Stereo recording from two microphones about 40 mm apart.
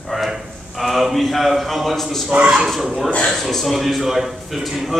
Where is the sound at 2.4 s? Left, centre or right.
Right.